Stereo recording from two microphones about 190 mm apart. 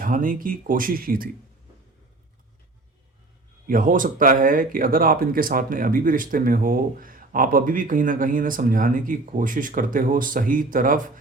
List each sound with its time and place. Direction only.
0.0 s speech: 45° right (ahead or behind)
3.7 s speech: 45° right (ahead or behind)